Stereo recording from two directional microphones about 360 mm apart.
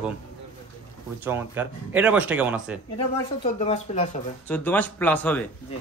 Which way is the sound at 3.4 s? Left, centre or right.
Centre.